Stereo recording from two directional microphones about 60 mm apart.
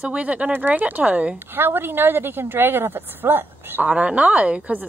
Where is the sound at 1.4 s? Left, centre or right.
Right.